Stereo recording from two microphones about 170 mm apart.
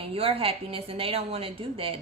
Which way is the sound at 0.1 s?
35° right (ahead or behind).